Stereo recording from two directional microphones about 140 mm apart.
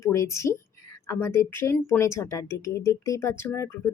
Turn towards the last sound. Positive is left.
turn(degrees=20)  # may be behind; listen again after turning